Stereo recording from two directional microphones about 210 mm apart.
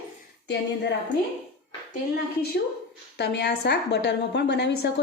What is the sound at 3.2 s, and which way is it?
A woman's voice, 55° left (ahead or behind).